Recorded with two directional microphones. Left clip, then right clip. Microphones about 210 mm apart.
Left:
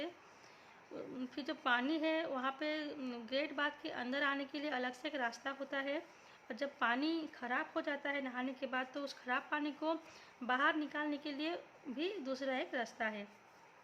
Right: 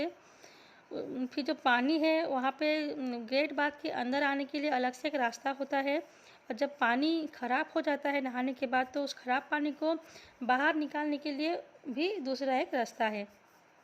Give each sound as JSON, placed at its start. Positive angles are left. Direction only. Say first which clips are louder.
{"t": 0.9, "sound": "a woman's voice", "louder": "right 9 dB", "side_deg": -30}